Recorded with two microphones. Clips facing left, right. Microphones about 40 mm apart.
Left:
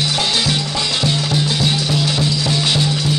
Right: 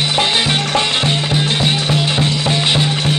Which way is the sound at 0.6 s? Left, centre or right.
Right.